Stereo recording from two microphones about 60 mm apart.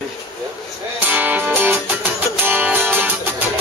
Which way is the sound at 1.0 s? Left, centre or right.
Right.